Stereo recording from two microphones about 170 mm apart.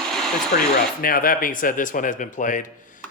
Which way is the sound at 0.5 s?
55° left (ahead or behind).